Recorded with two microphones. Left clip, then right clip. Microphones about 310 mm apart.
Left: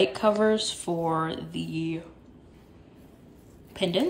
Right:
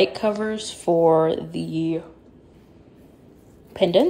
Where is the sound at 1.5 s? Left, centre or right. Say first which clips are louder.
Right 7 dB; centre.